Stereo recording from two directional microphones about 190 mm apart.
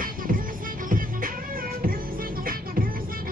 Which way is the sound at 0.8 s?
45° right (ahead or behind).